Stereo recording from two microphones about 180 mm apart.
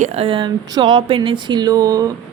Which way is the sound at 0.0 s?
35° right (ahead or behind).